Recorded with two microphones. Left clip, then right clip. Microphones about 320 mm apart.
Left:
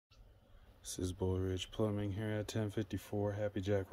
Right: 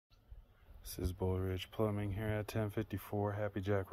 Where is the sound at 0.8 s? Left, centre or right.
Centre.